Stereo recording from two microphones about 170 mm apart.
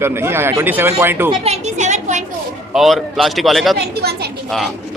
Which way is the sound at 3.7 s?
70° right (ahead or behind).